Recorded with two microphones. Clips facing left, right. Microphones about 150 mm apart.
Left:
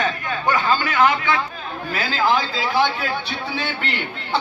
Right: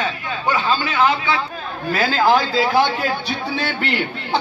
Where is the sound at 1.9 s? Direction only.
35° right (ahead or behind).